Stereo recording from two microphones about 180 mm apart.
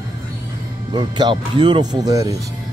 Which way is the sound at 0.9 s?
25° right (ahead or behind).